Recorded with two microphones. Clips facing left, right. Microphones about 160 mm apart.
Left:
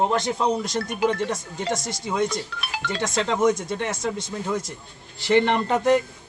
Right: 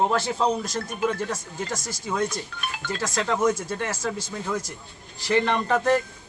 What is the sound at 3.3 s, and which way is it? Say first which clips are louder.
Speech: left 2 dB; 20° left (ahead or behind).